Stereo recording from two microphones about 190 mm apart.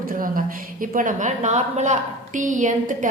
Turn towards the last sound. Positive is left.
turn(degrees=-40)  # may be behind; listen again after turning